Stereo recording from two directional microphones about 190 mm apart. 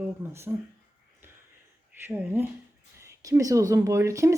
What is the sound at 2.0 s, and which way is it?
Speech, 10° right (ahead or behind).